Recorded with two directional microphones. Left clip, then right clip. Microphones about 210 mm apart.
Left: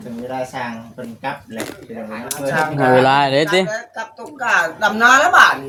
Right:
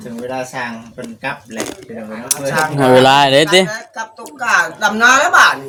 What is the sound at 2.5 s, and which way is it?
Speech, 45° right (ahead or behind).